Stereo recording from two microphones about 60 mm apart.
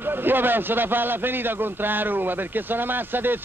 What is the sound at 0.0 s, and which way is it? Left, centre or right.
A man's voice, right.